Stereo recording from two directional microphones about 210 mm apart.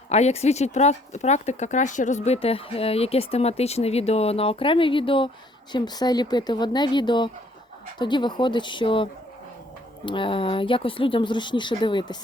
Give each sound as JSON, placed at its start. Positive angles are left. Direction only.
{"t": 0.1, "sound": "speech", "side_deg": 30}
{"t": 10.1, "sound": "speech", "side_deg": 25}